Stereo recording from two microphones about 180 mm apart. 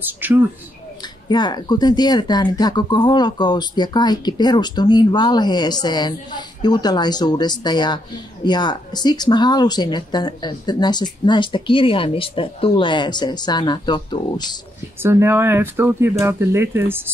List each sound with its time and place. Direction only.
0.0 s speech: 10° right (ahead or behind)
1.3 s speech: 25° left (ahead or behind)
15.0 s speech: 15° right (ahead or behind)